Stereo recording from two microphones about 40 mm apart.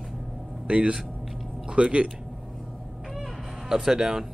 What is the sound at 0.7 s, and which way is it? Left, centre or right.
Speech, right.